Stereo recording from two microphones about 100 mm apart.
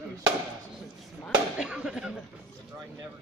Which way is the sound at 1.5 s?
5° right (ahead or behind).